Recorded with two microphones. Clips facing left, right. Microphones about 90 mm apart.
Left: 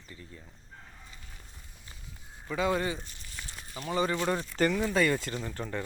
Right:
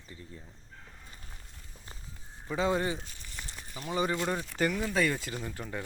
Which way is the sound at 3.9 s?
15° right (ahead or behind).